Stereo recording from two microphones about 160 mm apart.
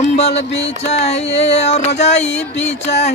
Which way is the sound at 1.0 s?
45° left (ahead or behind).